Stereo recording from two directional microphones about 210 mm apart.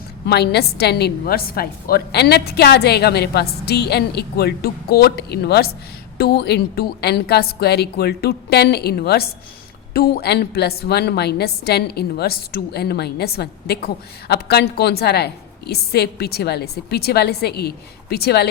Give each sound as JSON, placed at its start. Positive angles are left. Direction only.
{"t": 0.3, "sound": "a woman's voice", "side_deg": 50}